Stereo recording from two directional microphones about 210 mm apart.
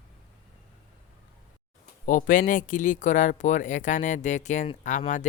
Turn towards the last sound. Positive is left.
turn(degrees=35)  # may be behind; listen again after turning